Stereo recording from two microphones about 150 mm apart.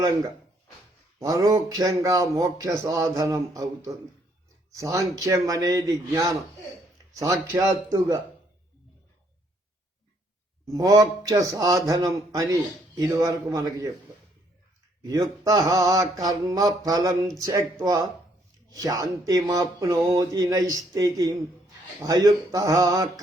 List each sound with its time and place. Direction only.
1.2 s speech: 25° right (ahead or behind)
10.7 s speech: 25° right (ahead or behind)
15.0 s speech: 25° right (ahead or behind)